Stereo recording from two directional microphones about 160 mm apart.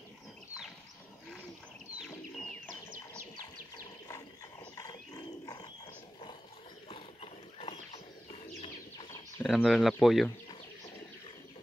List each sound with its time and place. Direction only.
2.0 s bird: 5° left (ahead or behind)
4.7 s wild animals: 25° left (ahead or behind)
6.9 s a sound: 35° left (ahead or behind)
9.4 s speech: centre (ahead or behind)